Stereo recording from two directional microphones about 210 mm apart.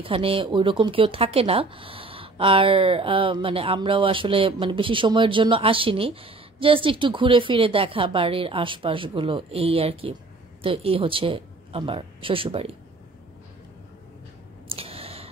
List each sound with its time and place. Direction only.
0.0 s speech: 25° right (ahead or behind)
14.7 s clicking: 25° right (ahead or behind)